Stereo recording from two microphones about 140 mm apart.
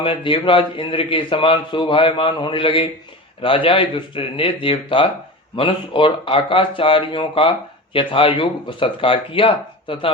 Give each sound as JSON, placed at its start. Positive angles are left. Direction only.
{"t": 0.0, "sound": "a man's voice", "side_deg": 40}